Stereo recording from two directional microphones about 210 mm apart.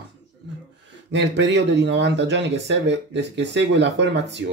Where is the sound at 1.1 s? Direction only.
55° right (ahead or behind).